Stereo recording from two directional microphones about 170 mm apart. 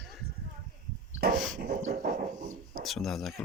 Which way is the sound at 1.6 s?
55° right (ahead or behind).